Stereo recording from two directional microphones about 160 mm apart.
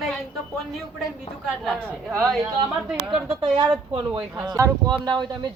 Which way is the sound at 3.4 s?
25° right (ahead or behind).